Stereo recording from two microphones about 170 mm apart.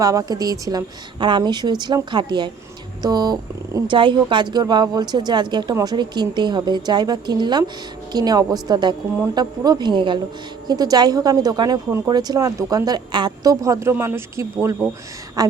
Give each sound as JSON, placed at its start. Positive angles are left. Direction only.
{"t": 0.0, "sound": "speech", "side_deg": -20}